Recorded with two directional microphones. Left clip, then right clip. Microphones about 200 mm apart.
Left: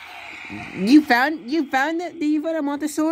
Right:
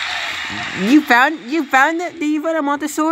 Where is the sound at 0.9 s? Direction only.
5° left (ahead or behind).